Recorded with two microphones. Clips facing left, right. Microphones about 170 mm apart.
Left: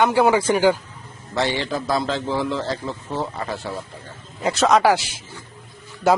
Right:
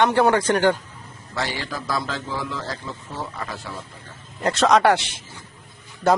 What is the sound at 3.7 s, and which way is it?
Speech, 40° left (ahead or behind).